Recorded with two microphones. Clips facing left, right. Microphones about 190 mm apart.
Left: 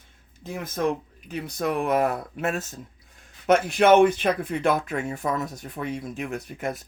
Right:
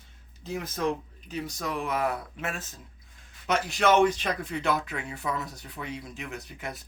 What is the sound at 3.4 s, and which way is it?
Speech, 55° left (ahead or behind).